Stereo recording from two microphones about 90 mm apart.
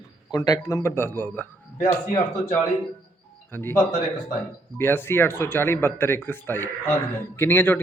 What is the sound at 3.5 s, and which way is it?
Speech, 25° left (ahead or behind).